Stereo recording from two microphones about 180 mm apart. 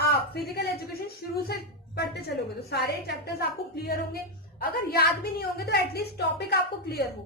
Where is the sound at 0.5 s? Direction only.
60° left (ahead or behind).